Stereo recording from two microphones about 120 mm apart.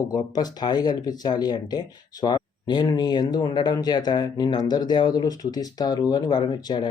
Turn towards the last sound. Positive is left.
turn(degrees=40)  # may be behind; listen again after turning